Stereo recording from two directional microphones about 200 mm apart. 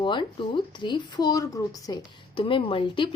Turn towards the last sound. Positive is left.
turn(degrees=25)  # may be behind; listen again after turning